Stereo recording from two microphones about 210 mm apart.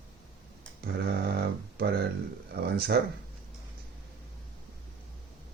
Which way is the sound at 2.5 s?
45° right (ahead or behind).